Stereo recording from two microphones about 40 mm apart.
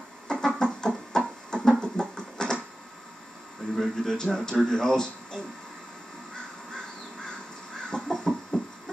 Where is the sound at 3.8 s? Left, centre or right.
Centre.